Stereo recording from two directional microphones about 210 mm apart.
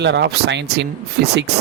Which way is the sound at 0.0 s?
55° right (ahead or behind).